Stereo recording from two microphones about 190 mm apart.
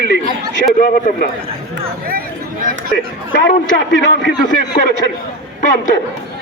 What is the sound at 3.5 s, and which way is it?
Speech, 65° left (ahead or behind).